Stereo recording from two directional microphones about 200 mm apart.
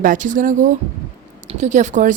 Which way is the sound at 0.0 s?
40° right (ahead or behind).